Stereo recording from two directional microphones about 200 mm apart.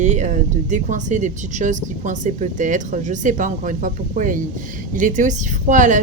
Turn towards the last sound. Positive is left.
turn(degrees=-40)  # may be behind; listen again after turning